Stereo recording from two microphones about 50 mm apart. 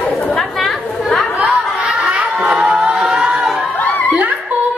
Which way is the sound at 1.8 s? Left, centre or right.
Centre.